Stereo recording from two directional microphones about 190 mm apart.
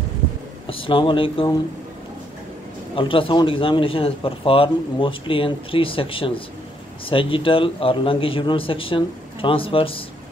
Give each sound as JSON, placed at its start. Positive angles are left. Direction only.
{"t": 0.7, "sound": "a man's voice", "side_deg": 30}
{"t": 3.0, "sound": "a man's voice", "side_deg": 25}